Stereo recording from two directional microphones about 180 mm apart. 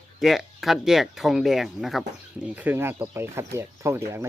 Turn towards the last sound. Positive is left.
turn(degrees=-15)  # may be behind; listen again after turning